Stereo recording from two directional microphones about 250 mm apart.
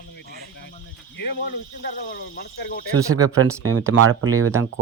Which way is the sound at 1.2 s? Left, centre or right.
Left.